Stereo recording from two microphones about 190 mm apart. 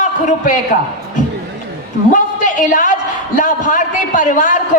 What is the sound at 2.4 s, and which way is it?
A woman's voice, 40° left (ahead or behind).